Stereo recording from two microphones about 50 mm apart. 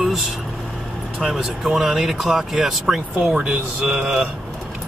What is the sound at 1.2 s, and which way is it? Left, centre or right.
Speech, centre.